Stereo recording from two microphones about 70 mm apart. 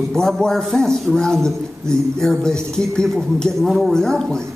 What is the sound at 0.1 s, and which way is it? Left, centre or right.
A man's voice, centre.